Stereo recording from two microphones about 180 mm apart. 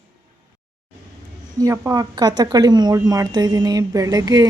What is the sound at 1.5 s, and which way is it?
Speech, 15° right (ahead or behind).